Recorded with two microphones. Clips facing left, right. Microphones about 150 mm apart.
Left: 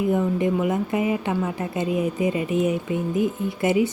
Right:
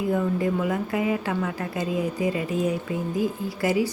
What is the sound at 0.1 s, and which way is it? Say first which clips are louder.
Speech: left 2 dB; 20° left (ahead or behind).